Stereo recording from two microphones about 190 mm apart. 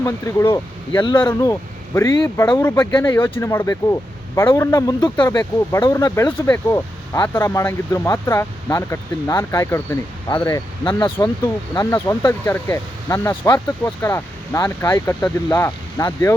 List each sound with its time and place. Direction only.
0.0 s speech: 15° left (ahead or behind)